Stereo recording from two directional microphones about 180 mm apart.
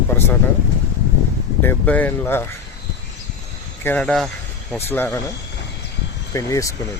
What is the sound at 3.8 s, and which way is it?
Speech, 10° left (ahead or behind).